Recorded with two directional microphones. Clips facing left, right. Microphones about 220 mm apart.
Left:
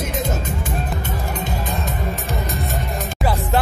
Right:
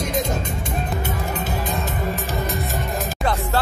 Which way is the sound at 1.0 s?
5° right (ahead or behind).